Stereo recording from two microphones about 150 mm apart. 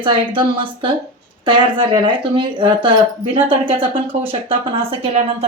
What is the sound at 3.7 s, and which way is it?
Speech, 15° right (ahead or behind).